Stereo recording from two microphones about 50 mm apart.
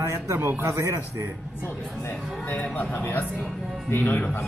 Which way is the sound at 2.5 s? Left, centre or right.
Left.